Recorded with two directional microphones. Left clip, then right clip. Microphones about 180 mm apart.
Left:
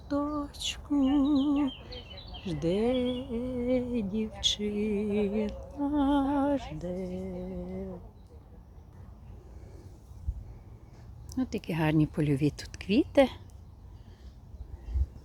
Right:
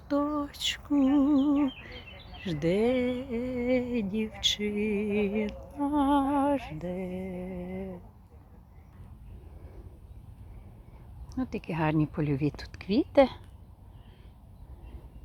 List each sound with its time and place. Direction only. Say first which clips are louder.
0.1 s female singing: right 3 dB; 15° right (ahead or behind)
1.4 s speech: right 2 dB; 15° right (ahead or behind)
11.3 s a woman's voice: left 1 dB; 20° left (ahead or behind)